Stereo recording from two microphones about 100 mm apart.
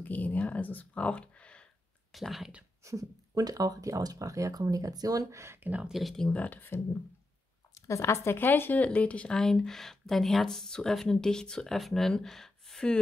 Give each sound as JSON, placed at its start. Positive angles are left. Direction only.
{"t": 0.0, "sound": "speech", "side_deg": 15}
{"t": 2.1, "sound": "speech", "side_deg": 0}
{"t": 2.8, "sound": "speech", "side_deg": -30}
{"t": 5.7, "sound": "speech", "side_deg": -15}
{"t": 5.9, "sound": "speech", "side_deg": 5}
{"t": 7.7, "sound": "speech", "side_deg": 30}